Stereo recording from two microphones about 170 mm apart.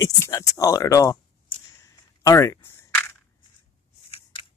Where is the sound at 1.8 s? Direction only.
20° left (ahead or behind).